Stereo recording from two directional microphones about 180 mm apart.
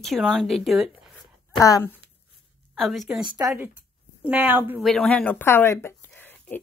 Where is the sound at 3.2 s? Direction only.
25° right (ahead or behind).